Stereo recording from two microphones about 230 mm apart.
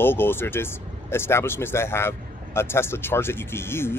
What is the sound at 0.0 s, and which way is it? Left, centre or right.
Speech, centre.